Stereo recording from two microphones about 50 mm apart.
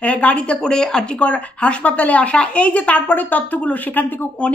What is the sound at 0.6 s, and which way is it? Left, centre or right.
Speech, centre.